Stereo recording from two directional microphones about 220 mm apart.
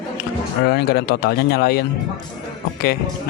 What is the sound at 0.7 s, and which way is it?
Speech, 45° left (ahead or behind).